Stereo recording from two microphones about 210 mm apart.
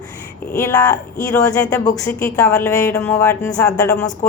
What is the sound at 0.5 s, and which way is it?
A woman's voice, 15° left (ahead or behind).